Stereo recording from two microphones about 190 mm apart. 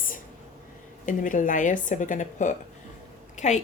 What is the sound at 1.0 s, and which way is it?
A woman's voice, 45° left (ahead or behind).